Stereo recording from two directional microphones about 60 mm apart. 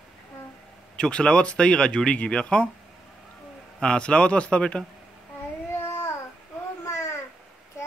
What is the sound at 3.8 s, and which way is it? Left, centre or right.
Speech, centre.